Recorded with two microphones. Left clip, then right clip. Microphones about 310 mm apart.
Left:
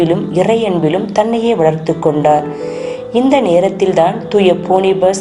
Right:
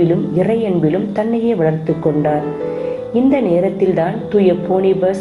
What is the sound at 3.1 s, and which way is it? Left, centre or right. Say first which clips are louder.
A woman's voice: left 4 dB; left.